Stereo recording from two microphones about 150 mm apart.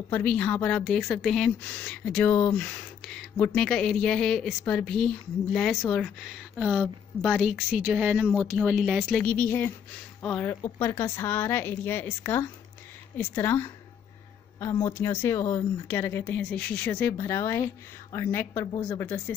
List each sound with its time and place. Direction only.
0.1 s speech: 10° left (ahead or behind); by 9.0 s 5° right (ahead or behind)
9.0 s speech: 10° left (ahead or behind)
10.5 s speech: 20° left (ahead or behind)